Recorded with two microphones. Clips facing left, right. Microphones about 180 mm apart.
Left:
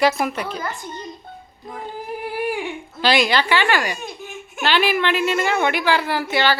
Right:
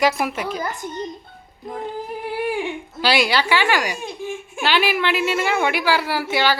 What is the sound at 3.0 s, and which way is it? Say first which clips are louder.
Speech: left 1 dB; 10° right (ahead or behind).